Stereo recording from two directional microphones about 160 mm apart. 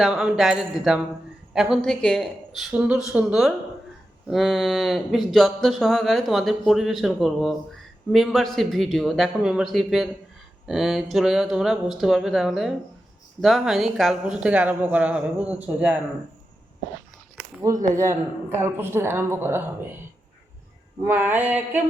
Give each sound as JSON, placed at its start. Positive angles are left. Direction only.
{"t": 0.0, "sound": "a woman's voice", "side_deg": -5}
{"t": 17.9, "sound": "a woman's voice", "side_deg": -15}
{"t": 21.0, "sound": "a woman's voice", "side_deg": -15}